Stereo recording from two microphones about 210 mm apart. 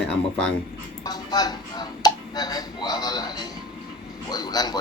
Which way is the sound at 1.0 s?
20° left (ahead or behind).